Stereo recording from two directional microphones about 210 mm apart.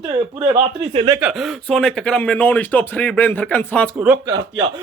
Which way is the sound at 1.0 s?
15° right (ahead or behind).